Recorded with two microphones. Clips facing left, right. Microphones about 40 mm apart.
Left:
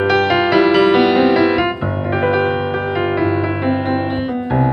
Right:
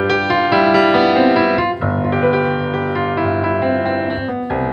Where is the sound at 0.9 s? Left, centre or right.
Centre.